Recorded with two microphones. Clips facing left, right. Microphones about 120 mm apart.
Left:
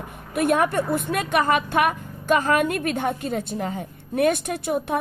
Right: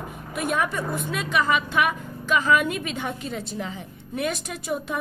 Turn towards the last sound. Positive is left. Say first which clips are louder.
# left 5 dB
turn(degrees=55)  # may be behind; listen again after turning